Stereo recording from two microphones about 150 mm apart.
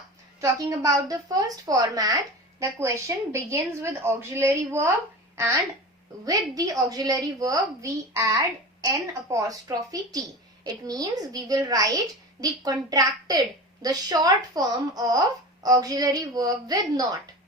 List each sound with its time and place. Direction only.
0.4 s a woman's voice: 20° right (ahead or behind)
6.2 s a woman's voice: 25° right (ahead or behind)